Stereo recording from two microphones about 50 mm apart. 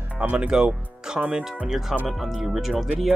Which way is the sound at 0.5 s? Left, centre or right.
Centre.